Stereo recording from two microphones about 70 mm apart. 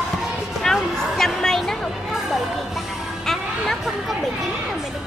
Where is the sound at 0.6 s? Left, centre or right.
Centre.